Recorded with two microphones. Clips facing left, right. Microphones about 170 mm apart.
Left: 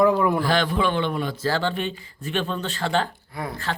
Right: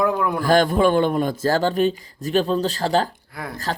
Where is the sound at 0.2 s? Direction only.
Centre (ahead or behind).